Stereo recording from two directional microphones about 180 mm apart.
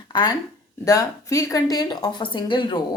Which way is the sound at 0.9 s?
20° left (ahead or behind).